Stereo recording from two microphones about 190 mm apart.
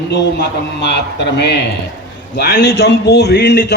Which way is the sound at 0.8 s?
65° left (ahead or behind).